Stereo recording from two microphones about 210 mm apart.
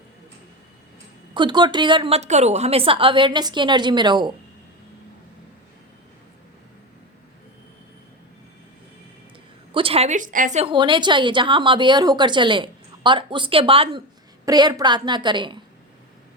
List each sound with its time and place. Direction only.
1.3 s a woman's voice: 20° right (ahead or behind)
9.7 s a woman's voice: 25° right (ahead or behind)